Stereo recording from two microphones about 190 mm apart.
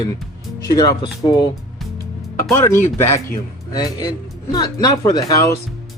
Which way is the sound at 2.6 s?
15° left (ahead or behind).